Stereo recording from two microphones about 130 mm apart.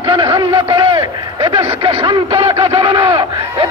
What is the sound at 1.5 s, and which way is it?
Speech, 50° right (ahead or behind).